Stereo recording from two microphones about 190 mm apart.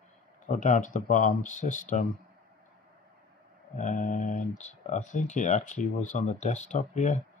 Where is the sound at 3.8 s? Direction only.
40° left (ahead or behind).